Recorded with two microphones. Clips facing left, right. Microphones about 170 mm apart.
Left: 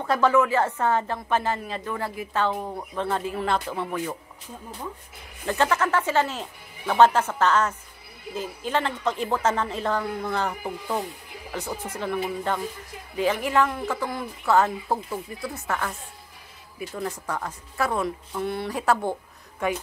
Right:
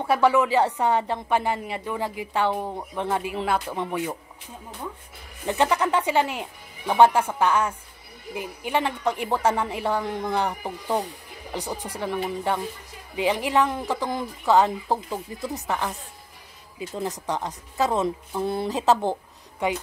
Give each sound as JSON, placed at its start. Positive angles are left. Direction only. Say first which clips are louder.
{"t": 0.0, "sound": "speech", "louder": "right 1 dB", "side_deg": -10}
{"t": 5.4, "sound": "a woman's voice", "louder": "right 1 dB", "side_deg": -15}